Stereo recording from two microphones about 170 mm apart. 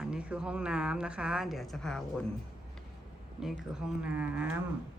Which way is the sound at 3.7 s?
5° right (ahead or behind).